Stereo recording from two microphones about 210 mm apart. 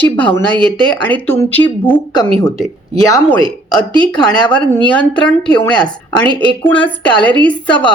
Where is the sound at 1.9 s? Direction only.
20° left (ahead or behind).